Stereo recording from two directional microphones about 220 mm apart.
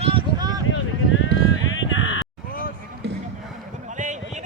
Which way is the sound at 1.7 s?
60° left (ahead or behind).